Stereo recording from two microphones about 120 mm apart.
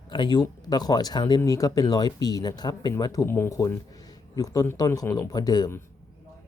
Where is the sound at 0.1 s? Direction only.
40° left (ahead or behind).